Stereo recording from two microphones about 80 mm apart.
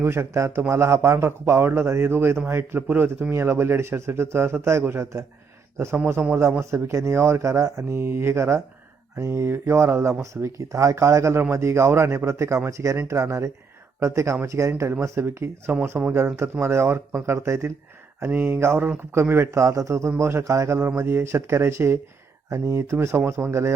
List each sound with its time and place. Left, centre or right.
0.0 s speech: right